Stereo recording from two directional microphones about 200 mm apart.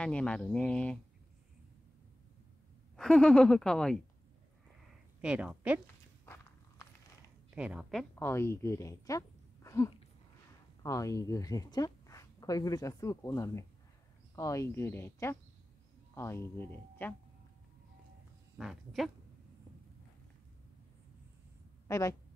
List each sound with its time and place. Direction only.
0.0 s speech: 5° left (ahead or behind)
3.0 s speech: 5° left (ahead or behind)
5.2 s a woman's voice: 5° right (ahead or behind)
6.2 s walk: 10° left (ahead or behind)
7.5 s speech: 5° right (ahead or behind)
8.3 s speech: 10° left (ahead or behind)
18.6 s speech: centre (ahead or behind)
21.8 s a woman's voice: 15° left (ahead or behind)